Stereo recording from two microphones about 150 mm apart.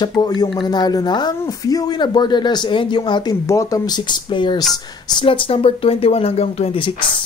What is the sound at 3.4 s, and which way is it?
Speech, 20° left (ahead or behind).